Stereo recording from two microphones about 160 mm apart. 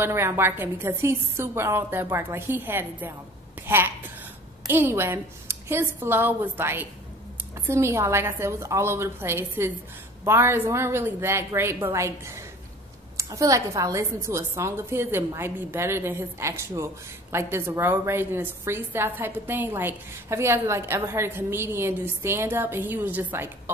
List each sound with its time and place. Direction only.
0.0 s a woman's voice: 15° right (ahead or behind)